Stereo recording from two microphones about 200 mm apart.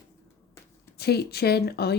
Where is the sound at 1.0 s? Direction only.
55° left (ahead or behind).